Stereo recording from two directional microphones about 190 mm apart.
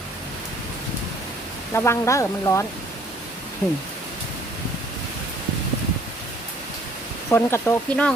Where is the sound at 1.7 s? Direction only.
15° left (ahead or behind).